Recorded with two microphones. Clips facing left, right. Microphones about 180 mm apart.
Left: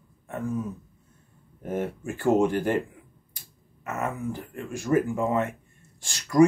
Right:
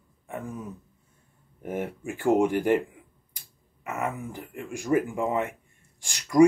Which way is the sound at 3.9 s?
15° right (ahead or behind).